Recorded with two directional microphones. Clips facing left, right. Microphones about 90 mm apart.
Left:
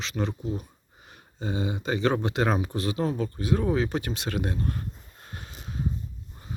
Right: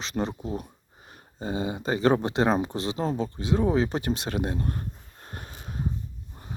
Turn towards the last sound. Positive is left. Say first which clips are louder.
# right 1 dB
turn(degrees=-45)  # may be behind; listen again after turning